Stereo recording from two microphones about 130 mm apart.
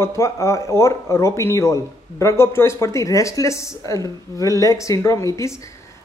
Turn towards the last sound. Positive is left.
turn(degrees=25)  # may be behind; listen again after turning